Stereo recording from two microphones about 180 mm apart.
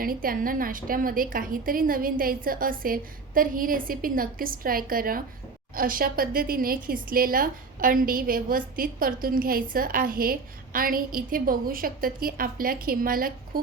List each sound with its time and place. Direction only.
0.0 s speech: 50° right (ahead or behind)